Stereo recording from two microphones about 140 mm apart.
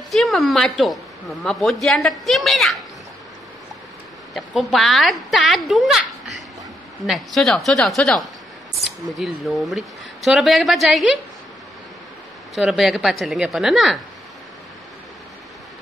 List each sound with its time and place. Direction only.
0.1 s a woman's voice: centre (ahead or behind)
4.3 s a woman's voice: centre (ahead or behind)
12.5 s speech: centre (ahead or behind)